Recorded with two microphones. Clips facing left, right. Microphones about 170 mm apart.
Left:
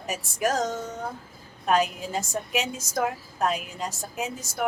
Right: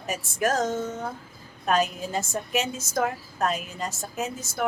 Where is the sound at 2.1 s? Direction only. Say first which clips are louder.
Right 1 dB; 10° left (ahead or behind).